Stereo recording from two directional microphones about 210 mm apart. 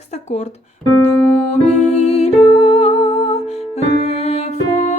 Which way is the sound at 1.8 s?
30° left (ahead or behind).